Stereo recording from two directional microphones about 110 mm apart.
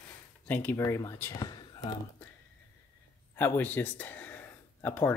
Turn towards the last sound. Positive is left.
turn(degrees=15)  # may be behind; listen again after turning